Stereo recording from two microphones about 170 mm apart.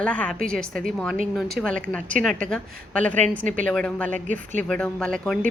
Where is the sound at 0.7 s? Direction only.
5° left (ahead or behind).